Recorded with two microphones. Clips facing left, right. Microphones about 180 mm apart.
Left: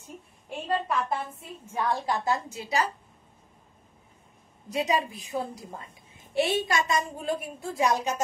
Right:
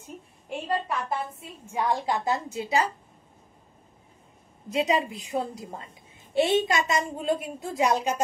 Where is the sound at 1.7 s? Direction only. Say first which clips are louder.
Right 2 dB; 15° right (ahead or behind).